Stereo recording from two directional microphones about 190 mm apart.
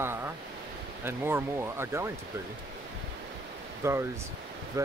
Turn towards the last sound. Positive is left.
turn(degrees=-15)  # may be behind; listen again after turning